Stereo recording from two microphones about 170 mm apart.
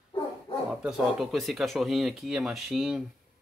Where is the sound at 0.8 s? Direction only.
5° right (ahead or behind).